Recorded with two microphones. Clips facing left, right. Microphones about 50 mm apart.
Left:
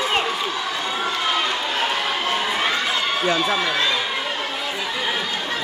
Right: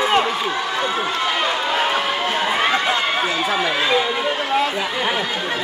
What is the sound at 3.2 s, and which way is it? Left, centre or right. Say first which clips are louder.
Speech: even; right.